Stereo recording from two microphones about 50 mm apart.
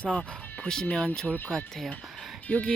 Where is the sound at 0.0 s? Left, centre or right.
Left.